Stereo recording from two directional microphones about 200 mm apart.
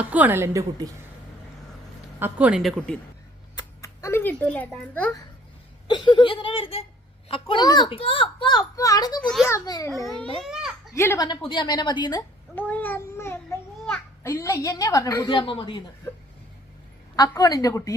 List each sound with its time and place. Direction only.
0.1 s a woman's voice: 10° right (ahead or behind)
2.1 s speech: 10° right (ahead or behind)
3.5 s a child's voice: 20° left (ahead or behind)
5.9 s a child's voice: 20° left (ahead or behind)
9.9 s speech: centre (ahead or behind)
10.9 s a woman's voice: 15° left (ahead or behind)
11.3 s a child's voice: 25° left (ahead or behind)
12.5 s a sound: 10° left (ahead or behind); by 15.8 s 25° left (ahead or behind)
17.2 s a woman's voice: 15° left (ahead or behind)